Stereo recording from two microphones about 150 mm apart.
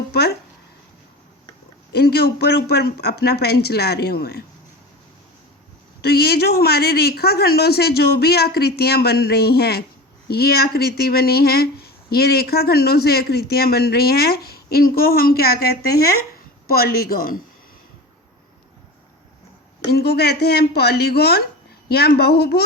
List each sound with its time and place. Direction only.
1.9 s speech: 90° left
6.0 s speech: 90° left
19.9 s speech: 90° left